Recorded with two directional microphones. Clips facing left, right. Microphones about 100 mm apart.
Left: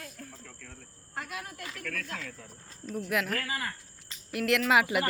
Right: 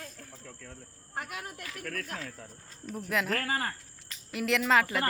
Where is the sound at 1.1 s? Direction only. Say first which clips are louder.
Even; 20° right (ahead or behind).